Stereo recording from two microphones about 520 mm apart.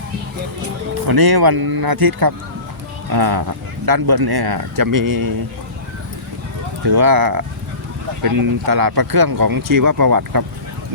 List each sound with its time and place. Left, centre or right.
1.0 s speech: right
6.8 s speech: right